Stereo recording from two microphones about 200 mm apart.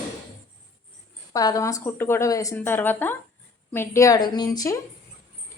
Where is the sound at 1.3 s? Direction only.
15° left (ahead or behind).